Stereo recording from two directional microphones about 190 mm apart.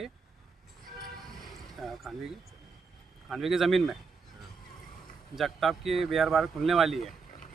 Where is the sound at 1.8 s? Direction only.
Centre (ahead or behind).